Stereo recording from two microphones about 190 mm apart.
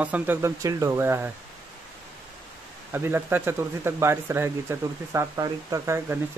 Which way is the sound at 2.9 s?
10° right (ahead or behind).